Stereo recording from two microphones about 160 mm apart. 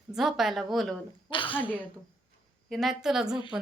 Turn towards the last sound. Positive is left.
turn(degrees=-5)  # may be behind; listen again after turning